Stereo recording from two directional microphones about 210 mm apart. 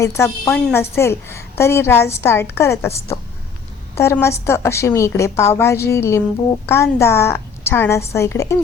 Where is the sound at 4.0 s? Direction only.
15° left (ahead or behind).